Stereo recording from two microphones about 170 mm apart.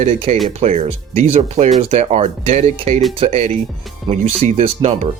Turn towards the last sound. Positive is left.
turn(degrees=-40)  # may be behind; listen again after turning